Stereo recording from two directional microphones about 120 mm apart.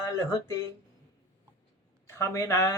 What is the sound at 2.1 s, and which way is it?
Speech, 25° left (ahead or behind).